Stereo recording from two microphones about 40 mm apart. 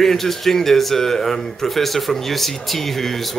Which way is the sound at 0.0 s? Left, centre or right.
Centre.